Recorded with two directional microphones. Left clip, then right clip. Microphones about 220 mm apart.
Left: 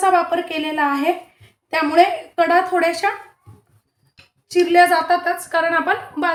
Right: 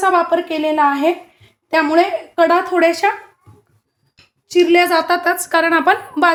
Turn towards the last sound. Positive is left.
turn(degrees=-50)  # may be behind; listen again after turning